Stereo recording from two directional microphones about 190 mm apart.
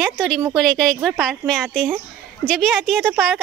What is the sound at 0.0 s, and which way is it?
A woman's voice, centre (ahead or behind).